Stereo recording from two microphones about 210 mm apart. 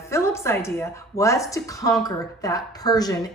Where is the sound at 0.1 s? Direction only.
15° left (ahead or behind).